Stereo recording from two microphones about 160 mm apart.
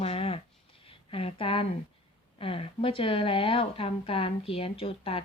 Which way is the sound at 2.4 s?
35° left (ahead or behind).